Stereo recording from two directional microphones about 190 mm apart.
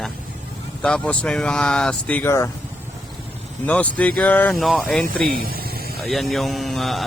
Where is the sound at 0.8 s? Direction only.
5° left (ahead or behind).